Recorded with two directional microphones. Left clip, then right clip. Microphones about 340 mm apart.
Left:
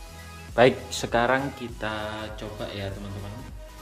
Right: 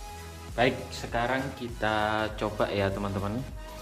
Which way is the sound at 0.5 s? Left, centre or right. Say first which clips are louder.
Left 7 dB; centre.